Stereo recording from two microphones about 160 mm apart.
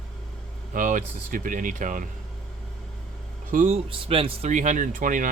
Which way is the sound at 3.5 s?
55° right (ahead or behind).